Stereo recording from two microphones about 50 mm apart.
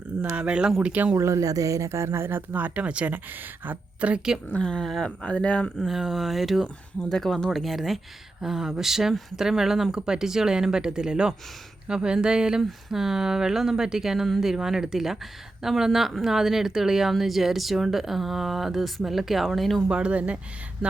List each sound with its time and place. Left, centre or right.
0.2 s speech: right
1.1 s speech: right
2.5 s speech: right
3.1 s speech: right
4.0 s speech: right
4.6 s speech: centre
5.9 s speech: centre
7.0 s speech: centre
19.9 s speech: right